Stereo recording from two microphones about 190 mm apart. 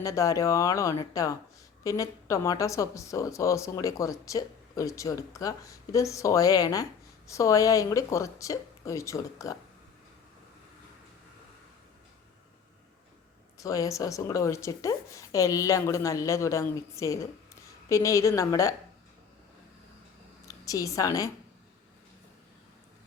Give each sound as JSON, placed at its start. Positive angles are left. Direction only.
{"t": 0.0, "sound": "a woman's voice", "side_deg": 15}
{"t": 13.6, "sound": "a woman's voice", "side_deg": 15}
{"t": 20.5, "sound": "a woman's voice", "side_deg": 20}